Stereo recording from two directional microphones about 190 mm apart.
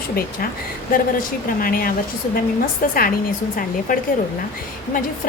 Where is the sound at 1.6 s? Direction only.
50° left (ahead or behind).